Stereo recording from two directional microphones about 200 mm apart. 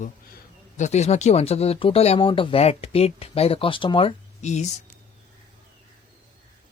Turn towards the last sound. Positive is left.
turn(degrees=35)  # may be behind; listen again after turning